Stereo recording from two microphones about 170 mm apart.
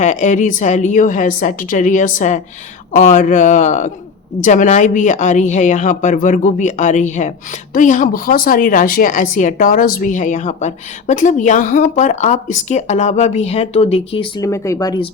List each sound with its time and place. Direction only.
0.0 s speech: 45° left (ahead or behind)
14.4 s speech: 15° left (ahead or behind)